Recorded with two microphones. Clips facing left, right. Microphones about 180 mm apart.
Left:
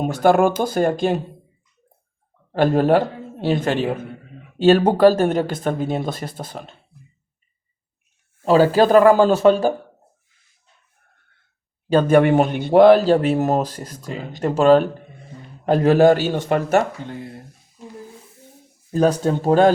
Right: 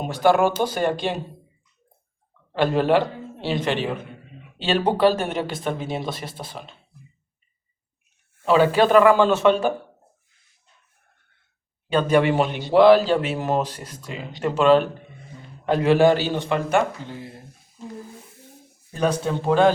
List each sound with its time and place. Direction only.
0.0 s a man's voice: 45° left (ahead or behind)
2.5 s a man's voice: 45° left (ahead or behind)
8.4 s speech: 40° left (ahead or behind)
11.9 s a man's voice: 45° left (ahead or behind)
18.9 s speech: 40° left (ahead or behind)